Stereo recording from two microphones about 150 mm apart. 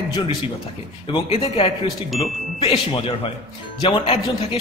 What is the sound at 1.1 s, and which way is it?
A man's voice, 40° left (ahead or behind).